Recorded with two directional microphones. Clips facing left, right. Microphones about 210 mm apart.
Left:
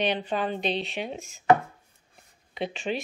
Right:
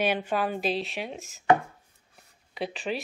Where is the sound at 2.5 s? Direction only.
Centre (ahead or behind).